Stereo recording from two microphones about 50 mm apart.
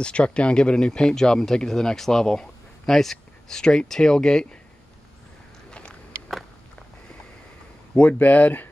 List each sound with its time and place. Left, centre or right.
0.0 s speech: left
5.7 s a sound: left
7.9 s speech: left